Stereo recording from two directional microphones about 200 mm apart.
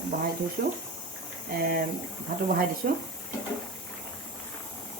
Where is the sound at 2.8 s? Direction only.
45° right (ahead or behind).